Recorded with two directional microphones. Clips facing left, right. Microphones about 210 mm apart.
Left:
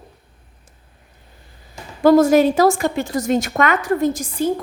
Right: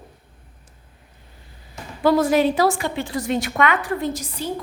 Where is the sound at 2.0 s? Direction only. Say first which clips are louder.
Left 5 dB; 45° left (ahead or behind).